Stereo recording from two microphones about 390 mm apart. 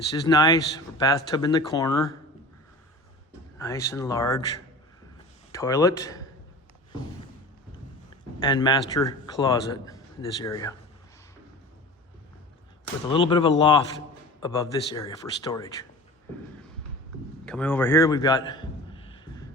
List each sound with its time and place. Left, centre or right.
0.3 s speech: centre
3.6 s speech: centre
8.4 s speech: centre
13.1 s speech: centre
17.4 s a sound: centre